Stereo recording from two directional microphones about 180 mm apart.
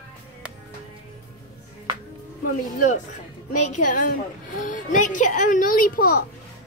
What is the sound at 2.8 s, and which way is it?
A child's voice, 45° left (ahead or behind).